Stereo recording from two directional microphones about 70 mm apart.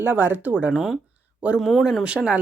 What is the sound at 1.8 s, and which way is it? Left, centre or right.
Speech, centre.